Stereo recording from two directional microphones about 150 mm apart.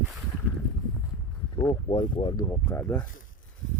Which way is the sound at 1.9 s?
30° left (ahead or behind).